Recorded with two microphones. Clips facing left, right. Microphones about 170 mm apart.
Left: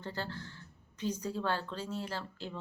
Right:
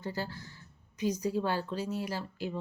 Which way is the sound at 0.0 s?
10° right (ahead or behind).